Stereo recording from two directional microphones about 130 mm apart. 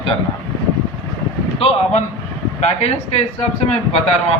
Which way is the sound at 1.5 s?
50° left (ahead or behind).